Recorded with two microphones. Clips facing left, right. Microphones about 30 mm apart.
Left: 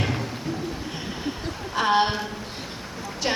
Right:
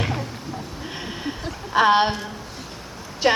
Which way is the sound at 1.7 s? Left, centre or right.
Right.